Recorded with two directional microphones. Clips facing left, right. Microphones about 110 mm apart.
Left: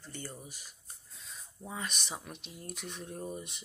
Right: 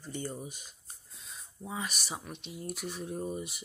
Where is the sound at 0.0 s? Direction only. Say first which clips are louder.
Right 7 dB; 15° right (ahead or behind).